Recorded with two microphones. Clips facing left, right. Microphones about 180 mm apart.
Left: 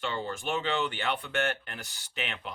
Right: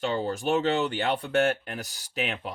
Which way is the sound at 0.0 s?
40° right (ahead or behind).